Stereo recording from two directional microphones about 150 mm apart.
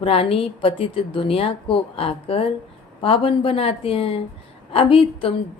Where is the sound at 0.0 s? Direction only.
40° left (ahead or behind).